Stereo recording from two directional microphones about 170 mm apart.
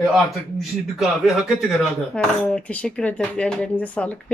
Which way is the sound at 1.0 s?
Centre (ahead or behind).